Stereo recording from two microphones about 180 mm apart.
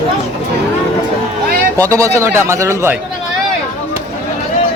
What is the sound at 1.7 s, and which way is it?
A man's voice, 15° right (ahead or behind).